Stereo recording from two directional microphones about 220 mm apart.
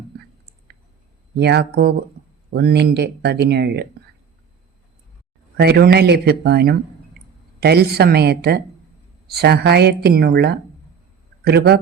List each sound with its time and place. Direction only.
1.4 s a woman's voice: 50° right (ahead or behind)
5.5 s a woman's voice: 45° right (ahead or behind)